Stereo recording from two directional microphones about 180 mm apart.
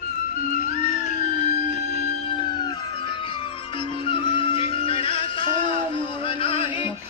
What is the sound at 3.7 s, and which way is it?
Music, 30° left (ahead or behind).